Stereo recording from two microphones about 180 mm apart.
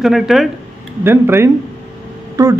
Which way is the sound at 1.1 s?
15° right (ahead or behind).